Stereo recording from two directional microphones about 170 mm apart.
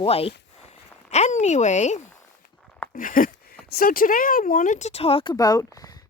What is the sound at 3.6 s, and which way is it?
Speech, 60° left (ahead or behind).